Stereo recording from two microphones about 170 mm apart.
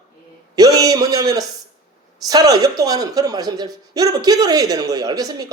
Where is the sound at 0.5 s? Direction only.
20° right (ahead or behind).